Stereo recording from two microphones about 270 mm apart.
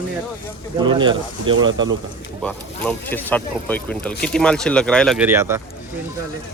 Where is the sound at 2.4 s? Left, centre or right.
Centre.